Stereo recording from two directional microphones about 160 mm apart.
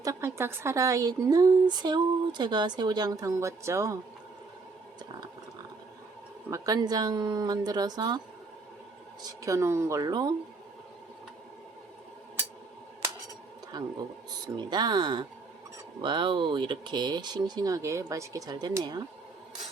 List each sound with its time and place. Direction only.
0.0 s a woman's voice: 20° right (ahead or behind)
6.5 s a woman's voice: 25° right (ahead or behind)
9.2 s a woman's voice: 20° right (ahead or behind)
13.7 s a woman's voice: 25° right (ahead or behind)